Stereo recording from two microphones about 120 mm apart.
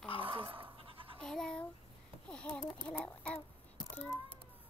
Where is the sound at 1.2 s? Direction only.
5° left (ahead or behind).